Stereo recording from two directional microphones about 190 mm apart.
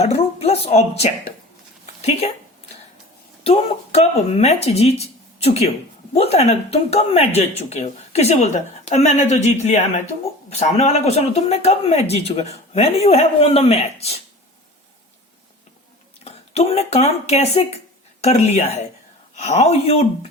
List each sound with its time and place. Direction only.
0.0 s a sound: 35° left (ahead or behind)
2.0 s speech: 35° left (ahead or behind)
3.4 s speech: 35° left (ahead or behind)
16.2 s speech: 35° left (ahead or behind)